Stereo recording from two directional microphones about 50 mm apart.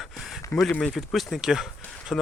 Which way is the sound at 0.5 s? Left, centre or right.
Left.